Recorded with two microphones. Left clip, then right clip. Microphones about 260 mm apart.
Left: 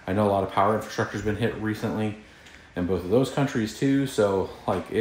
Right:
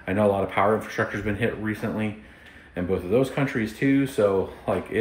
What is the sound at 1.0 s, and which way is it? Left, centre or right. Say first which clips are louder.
Speech: right 1 dB; centre.